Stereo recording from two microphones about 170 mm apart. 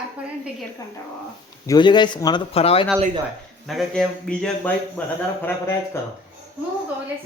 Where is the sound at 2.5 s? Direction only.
35° left (ahead or behind).